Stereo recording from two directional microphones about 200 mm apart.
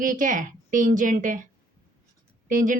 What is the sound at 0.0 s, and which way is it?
A woman's voice, 40° right (ahead or behind).